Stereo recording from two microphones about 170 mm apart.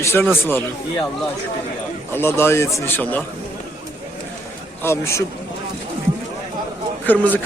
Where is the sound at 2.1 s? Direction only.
15° left (ahead or behind).